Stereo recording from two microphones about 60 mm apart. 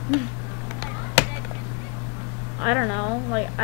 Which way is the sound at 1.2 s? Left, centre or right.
Right.